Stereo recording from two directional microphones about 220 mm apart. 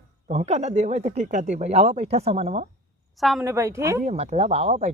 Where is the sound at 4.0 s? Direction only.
30° right (ahead or behind).